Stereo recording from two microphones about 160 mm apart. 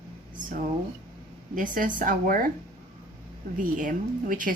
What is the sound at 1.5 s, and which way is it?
Speech, 55° right (ahead or behind).